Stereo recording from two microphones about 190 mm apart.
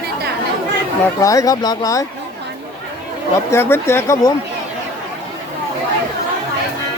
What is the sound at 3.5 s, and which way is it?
Speech, 10° left (ahead or behind).